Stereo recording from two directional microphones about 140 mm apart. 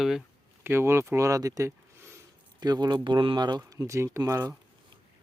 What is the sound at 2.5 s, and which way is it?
Speech, 30° right (ahead or behind).